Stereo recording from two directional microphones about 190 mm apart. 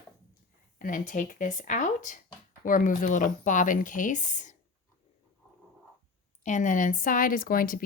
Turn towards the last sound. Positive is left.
turn(degrees=45)  # may be behind; listen again after turning